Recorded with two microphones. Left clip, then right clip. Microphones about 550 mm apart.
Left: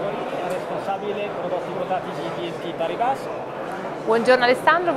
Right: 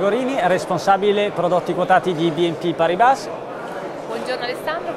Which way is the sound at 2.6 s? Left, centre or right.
Right.